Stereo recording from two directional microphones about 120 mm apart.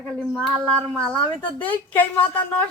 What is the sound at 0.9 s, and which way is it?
Speech, 10° left (ahead or behind).